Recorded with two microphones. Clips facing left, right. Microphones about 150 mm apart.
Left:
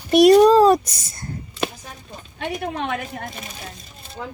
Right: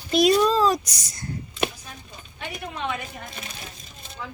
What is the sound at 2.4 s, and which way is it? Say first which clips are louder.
Speech: left 6 dB; 60° left (ahead or behind).